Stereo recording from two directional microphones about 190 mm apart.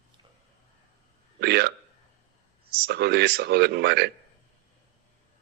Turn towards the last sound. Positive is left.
turn(degrees=-60)  # may be behind; listen again after turning